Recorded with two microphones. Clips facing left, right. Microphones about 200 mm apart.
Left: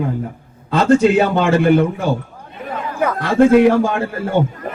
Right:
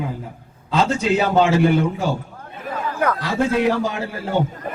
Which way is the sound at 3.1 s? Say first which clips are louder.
Left 9 dB; 55° left (ahead or behind).